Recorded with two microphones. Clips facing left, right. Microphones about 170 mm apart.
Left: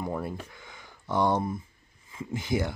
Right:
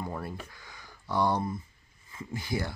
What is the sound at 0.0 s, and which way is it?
Speech, 20° left (ahead or behind).